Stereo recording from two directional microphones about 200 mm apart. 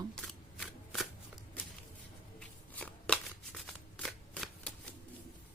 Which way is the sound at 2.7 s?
5° left (ahead or behind).